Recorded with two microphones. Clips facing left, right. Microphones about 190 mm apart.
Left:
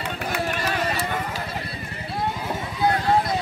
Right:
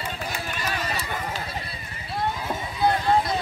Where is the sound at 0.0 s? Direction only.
65° left (ahead or behind).